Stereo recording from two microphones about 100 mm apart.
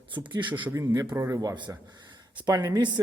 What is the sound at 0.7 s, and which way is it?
Speech, 35° right (ahead or behind).